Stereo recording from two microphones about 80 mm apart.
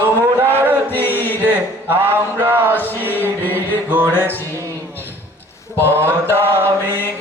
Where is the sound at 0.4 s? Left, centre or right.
Right.